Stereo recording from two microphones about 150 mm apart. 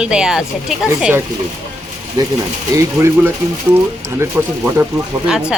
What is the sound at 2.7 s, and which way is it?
Speech, 20° right (ahead or behind).